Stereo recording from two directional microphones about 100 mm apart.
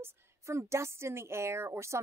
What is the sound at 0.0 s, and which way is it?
A woman's voice, 30° right (ahead or behind).